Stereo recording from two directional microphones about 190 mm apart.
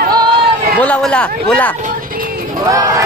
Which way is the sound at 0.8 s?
5° left (ahead or behind).